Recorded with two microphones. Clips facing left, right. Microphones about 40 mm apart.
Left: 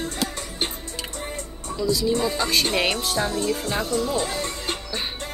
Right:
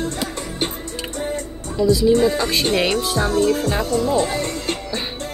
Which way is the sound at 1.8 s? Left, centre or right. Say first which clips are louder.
Right 8 dB; centre.